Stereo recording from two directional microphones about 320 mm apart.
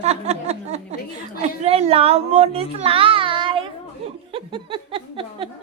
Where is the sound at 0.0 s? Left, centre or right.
Centre.